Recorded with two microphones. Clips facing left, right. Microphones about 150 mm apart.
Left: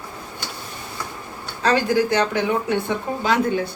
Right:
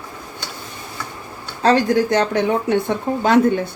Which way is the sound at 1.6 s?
40° right (ahead or behind).